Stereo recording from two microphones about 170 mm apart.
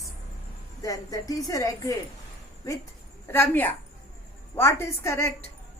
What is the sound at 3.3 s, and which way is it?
Speech, 10° left (ahead or behind).